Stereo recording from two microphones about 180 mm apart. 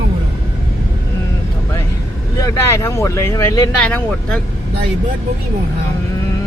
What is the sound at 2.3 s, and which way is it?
Speech, 20° left (ahead or behind).